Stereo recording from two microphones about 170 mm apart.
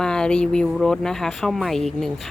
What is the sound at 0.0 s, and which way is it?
Speech, 5° left (ahead or behind).